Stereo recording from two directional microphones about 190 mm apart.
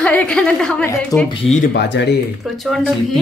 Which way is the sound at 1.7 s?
65° left (ahead or behind).